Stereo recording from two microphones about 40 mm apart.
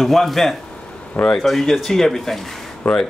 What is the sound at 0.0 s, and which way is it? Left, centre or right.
A man's voice, centre.